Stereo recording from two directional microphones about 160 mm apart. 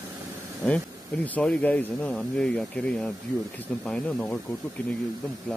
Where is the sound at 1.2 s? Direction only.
10° left (ahead or behind).